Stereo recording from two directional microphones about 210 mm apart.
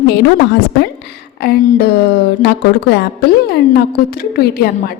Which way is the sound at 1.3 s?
50° left (ahead or behind).